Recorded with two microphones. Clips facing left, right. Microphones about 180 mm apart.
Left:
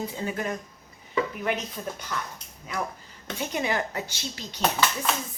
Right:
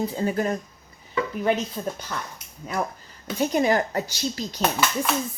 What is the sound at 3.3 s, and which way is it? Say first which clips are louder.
Speech: right 7 dB; 40° right (ahead or behind).